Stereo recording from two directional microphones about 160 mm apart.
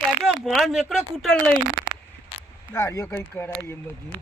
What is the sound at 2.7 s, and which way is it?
Speech, 15° left (ahead or behind).